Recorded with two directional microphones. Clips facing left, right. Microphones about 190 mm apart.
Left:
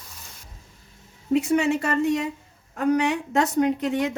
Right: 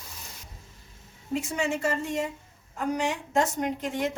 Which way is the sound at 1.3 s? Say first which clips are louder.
Left 8 dB; 65° left (ahead or behind).